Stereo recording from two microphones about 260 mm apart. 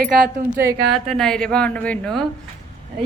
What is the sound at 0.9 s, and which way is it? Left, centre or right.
A woman's voice, centre.